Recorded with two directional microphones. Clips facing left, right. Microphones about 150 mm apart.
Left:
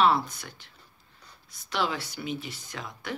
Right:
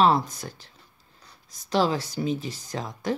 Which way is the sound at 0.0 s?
40° right (ahead or behind).